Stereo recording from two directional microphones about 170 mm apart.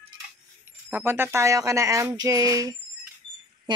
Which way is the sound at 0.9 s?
15° right (ahead or behind).